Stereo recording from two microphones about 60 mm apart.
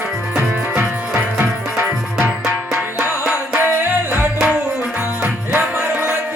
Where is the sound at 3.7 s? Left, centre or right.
Right.